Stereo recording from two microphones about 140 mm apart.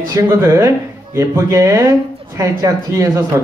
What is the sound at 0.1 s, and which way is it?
Speech, 20° right (ahead or behind).